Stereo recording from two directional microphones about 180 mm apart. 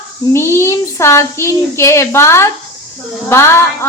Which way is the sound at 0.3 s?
15° left (ahead or behind).